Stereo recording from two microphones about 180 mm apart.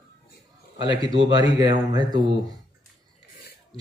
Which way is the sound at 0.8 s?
25° right (ahead or behind).